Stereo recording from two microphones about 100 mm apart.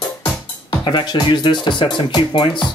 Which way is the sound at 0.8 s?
45° left (ahead or behind).